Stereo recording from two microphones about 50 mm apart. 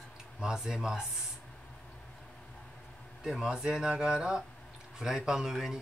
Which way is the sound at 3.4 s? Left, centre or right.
Centre.